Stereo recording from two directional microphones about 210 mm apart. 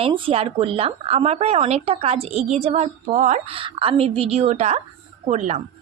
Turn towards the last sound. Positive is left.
turn(degrees=-30)  # may be behind; listen again after turning